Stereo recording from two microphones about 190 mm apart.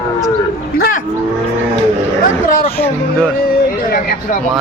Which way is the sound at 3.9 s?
45° left (ahead or behind).